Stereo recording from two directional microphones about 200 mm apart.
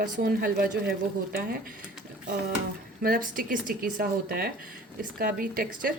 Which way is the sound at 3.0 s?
45° right (ahead or behind).